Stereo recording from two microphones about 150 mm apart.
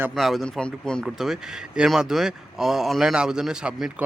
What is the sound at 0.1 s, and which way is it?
Speech, centre (ahead or behind).